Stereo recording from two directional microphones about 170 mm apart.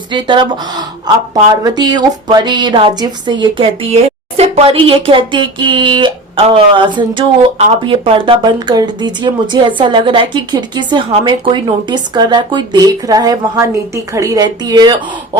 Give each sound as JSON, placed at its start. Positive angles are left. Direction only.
{"t": 0.1, "sound": "speech", "side_deg": -25}